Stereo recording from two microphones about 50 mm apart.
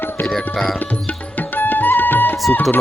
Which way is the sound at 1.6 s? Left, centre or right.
Left.